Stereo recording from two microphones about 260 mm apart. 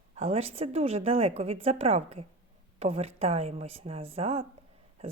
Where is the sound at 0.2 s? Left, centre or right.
Right.